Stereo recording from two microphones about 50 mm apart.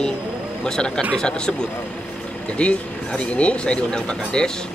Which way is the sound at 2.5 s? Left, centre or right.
Left.